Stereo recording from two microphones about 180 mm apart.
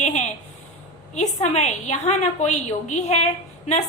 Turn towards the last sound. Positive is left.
turn(degrees=40)  # may be behind; listen again after turning